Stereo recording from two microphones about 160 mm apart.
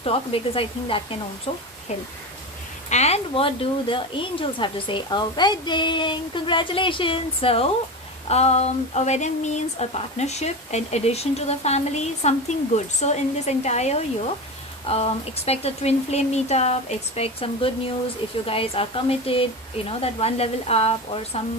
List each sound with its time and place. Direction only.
0.0 s speech: 35° left (ahead or behind)
1.9 s speech: 45° left (ahead or behind)